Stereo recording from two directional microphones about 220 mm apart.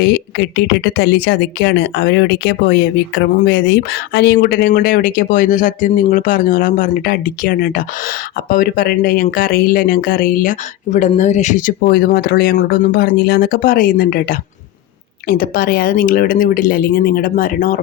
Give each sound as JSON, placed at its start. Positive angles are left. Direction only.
{"t": 0.0, "sound": "speech", "side_deg": 50}